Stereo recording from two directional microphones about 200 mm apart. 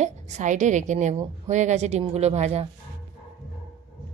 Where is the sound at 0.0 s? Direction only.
35° right (ahead or behind).